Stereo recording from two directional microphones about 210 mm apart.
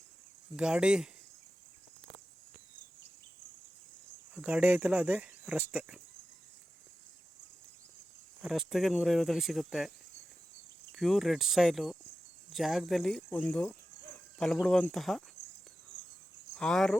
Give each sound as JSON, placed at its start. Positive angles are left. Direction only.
{"t": 0.5, "sound": "speech", "side_deg": -5}
{"t": 4.4, "sound": "speech", "side_deg": -5}
{"t": 8.4, "sound": "speech", "side_deg": 0}
{"t": 10.9, "sound": "speech", "side_deg": 0}
{"t": 16.6, "sound": "speech", "side_deg": 5}